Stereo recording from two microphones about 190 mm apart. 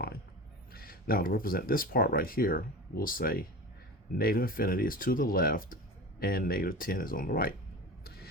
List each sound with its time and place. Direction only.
0.7 s speech: 50° left (ahead or behind)
8.0 s vehicle: 55° left (ahead or behind)